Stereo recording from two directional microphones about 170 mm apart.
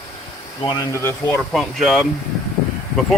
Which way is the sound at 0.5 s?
25° left (ahead or behind).